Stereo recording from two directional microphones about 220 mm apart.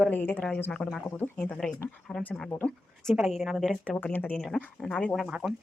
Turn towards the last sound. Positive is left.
turn(degrees=0)  # may be behind; listen again after turning